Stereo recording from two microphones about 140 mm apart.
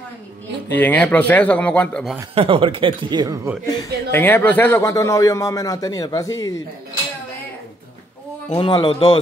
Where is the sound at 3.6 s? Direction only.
15° left (ahead or behind).